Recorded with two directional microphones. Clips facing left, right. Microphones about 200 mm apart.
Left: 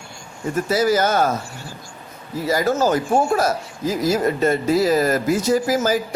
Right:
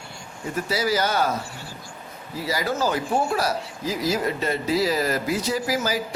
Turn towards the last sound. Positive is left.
turn(degrees=45)  # may be behind; listen again after turning